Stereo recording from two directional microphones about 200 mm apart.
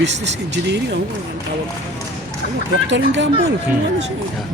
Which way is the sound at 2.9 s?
65° right (ahead or behind).